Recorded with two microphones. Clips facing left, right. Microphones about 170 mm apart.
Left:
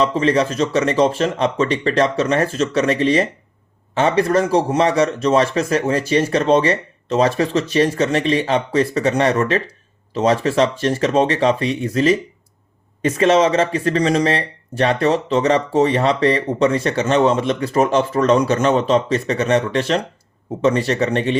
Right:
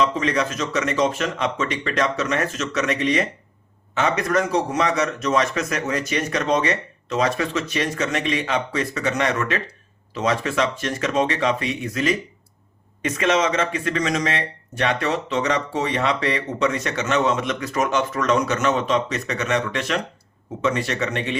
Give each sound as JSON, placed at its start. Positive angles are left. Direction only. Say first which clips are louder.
{"t": 0.0, "sound": "speech", "louder": "left 5 dB", "side_deg": 35}